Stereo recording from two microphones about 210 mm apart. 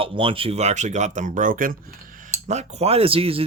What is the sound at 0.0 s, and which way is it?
Speech, 25° right (ahead or behind).